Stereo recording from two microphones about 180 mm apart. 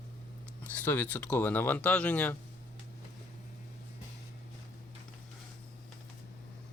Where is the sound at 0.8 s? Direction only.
10° left (ahead or behind).